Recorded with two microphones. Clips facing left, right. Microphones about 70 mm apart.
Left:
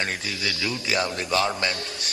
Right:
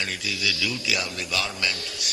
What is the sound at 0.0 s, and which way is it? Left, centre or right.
A man's voice, left.